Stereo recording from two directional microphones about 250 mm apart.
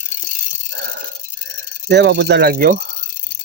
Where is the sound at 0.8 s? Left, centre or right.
Right.